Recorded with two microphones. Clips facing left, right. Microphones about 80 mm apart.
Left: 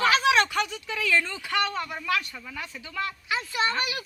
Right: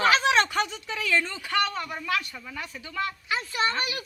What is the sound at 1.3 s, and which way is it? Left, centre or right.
Speech, centre.